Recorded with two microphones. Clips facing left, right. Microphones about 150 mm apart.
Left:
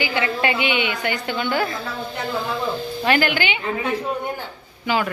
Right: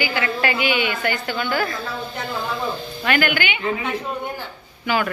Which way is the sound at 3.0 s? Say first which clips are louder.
Left 1 dB; 30° left (ahead or behind).